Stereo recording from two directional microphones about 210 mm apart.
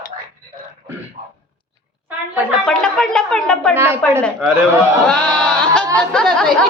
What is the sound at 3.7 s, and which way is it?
Speech, 10° right (ahead or behind).